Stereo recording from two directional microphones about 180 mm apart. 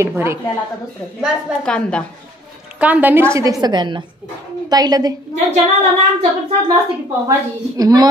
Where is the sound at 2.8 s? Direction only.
10° right (ahead or behind).